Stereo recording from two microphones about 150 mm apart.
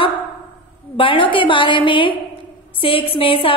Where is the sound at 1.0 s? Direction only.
35° left (ahead or behind).